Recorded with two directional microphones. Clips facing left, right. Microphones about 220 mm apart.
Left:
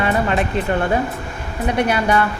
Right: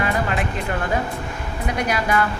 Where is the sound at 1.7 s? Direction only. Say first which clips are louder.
Left 5 dB; 30° left (ahead or behind).